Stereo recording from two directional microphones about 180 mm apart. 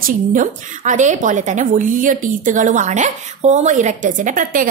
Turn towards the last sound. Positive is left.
turn(degrees=-50)  # may be behind; listen again after turning